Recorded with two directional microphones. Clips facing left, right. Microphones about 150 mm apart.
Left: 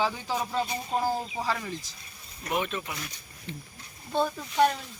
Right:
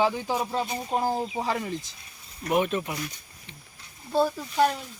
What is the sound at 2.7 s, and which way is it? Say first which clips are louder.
Speech: right 6 dB; 10° right (ahead or behind).